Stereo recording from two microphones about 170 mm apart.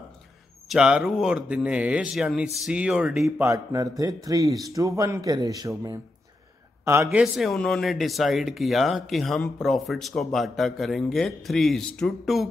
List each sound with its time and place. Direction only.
0.7 s speech: 5° right (ahead or behind)
3.3 s a man's voice: 20° right (ahead or behind)
7.3 s speech: centre (ahead or behind)